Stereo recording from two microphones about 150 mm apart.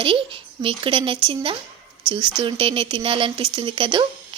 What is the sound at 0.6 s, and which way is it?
Speech, 35° right (ahead or behind).